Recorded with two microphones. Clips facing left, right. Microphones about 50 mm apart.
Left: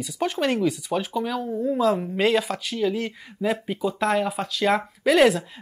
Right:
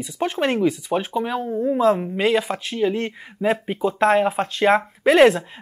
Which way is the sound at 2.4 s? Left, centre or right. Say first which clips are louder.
Right 3 dB; right.